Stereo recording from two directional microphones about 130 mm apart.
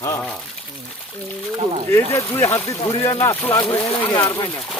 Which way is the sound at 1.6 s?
50° right (ahead or behind).